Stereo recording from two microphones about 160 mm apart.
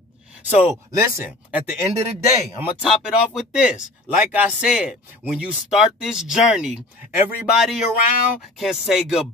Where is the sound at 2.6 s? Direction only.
5° right (ahead or behind).